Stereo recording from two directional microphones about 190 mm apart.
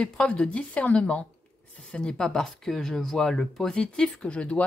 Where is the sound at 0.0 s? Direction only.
5° left (ahead or behind).